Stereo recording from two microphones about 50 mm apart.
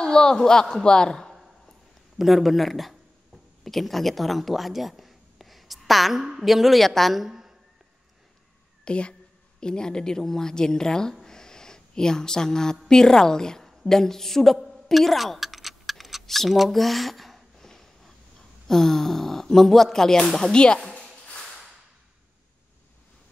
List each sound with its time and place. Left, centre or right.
0.0 s a man's voice: centre
2.1 s a woman's voice: centre
8.8 s a woman's voice: left
11.2 s a sound: centre
12.8 s a woman's voice: centre
17.6 s a sound: centre
18.7 s a woman's voice: centre